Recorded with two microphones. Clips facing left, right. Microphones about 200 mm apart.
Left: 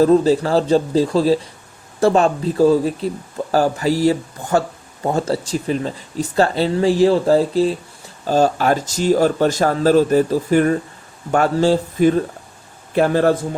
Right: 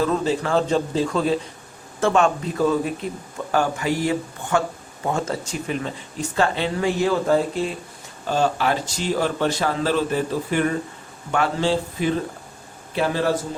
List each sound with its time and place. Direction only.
0.0 s speech: 35° left (ahead or behind)